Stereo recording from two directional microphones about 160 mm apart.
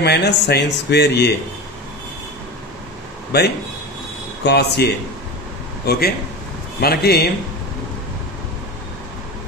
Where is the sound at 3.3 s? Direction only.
90° left.